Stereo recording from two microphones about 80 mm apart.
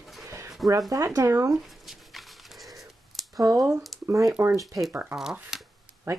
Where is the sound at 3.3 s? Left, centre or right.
Right.